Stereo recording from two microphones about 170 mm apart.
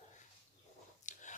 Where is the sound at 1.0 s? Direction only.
45° left (ahead or behind).